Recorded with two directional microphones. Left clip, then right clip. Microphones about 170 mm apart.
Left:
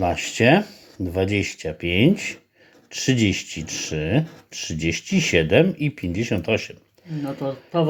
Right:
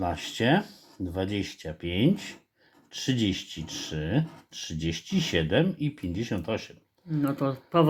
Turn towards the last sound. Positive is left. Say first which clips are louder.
# left 1 dB
turn(degrees=-40)  # may be behind; listen again after turning